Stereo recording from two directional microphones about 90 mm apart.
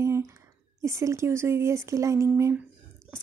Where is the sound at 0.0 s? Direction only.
30° right (ahead or behind).